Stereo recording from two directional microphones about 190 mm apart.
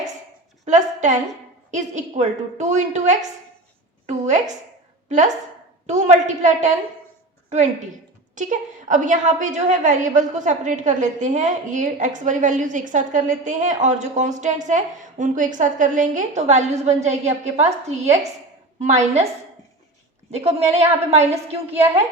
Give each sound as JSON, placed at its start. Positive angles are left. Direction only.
{"t": 0.6, "sound": "a woman's voice", "side_deg": -40}
{"t": 4.0, "sound": "a sound", "side_deg": -40}
{"t": 5.0, "sound": "a woman's voice", "side_deg": -40}
{"t": 20.3, "sound": "a woman's voice", "side_deg": -35}